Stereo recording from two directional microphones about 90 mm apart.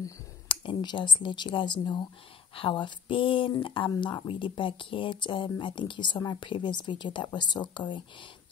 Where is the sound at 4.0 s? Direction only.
60° left (ahead or behind).